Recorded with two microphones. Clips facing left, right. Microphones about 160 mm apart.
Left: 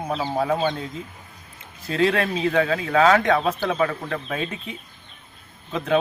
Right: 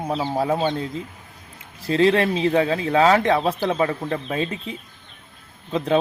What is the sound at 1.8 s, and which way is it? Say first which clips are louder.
Speech: right 4 dB; 30° right (ahead or behind).